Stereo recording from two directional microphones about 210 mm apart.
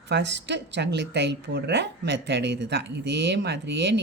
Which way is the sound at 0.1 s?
55° right (ahead or behind).